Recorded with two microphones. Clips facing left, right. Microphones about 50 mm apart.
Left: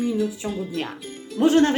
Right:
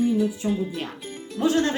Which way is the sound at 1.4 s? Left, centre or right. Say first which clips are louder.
Left 5 dB; left.